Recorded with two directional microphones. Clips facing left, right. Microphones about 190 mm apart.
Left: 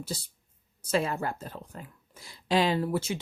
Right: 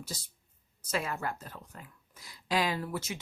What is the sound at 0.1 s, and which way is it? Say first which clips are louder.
Speech: left 6 dB; 30° left (ahead or behind).